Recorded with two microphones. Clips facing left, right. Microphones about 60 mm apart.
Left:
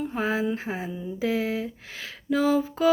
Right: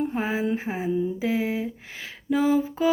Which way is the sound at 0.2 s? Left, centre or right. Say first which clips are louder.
Even; centre.